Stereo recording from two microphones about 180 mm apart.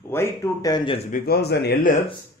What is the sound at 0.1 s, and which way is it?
Speech, 15° left (ahead or behind).